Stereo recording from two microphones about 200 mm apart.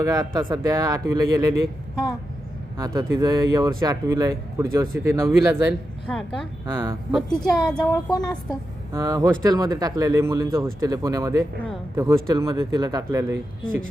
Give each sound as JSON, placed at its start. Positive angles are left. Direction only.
{"t": 0.0, "sound": "speech", "side_deg": -20}
{"t": 2.7, "sound": "speech", "side_deg": -20}
{"t": 6.1, "sound": "a woman's voice", "side_deg": 5}
{"t": 6.7, "sound": "speech", "side_deg": -10}
{"t": 7.1, "sound": "a woman's voice", "side_deg": 0}
{"t": 8.9, "sound": "speech", "side_deg": -15}